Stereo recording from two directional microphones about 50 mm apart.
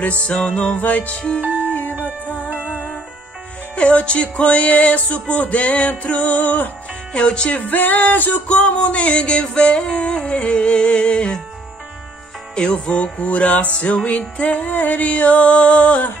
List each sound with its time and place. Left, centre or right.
0.3 s music: centre
1.1 s music: centre
1.6 s music: left
2.5 s music: centre
3.7 s music: left
7.2 s music: left
7.6 s music: left
8.5 s music: left
12.5 s music: centre
14.7 s music: left